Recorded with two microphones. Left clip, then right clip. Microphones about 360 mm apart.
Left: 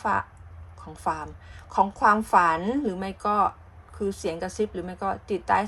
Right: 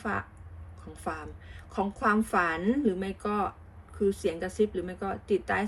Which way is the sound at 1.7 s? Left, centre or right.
Centre.